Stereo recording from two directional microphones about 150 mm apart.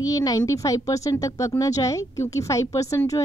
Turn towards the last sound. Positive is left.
turn(degrees=20)  # may be behind; listen again after turning